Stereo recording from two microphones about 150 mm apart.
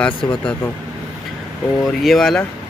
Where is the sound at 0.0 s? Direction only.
5° left (ahead or behind).